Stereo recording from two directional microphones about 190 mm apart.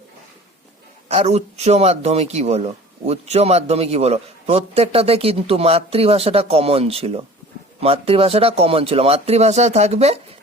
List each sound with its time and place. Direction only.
1.0 s speech: 35° right (ahead or behind)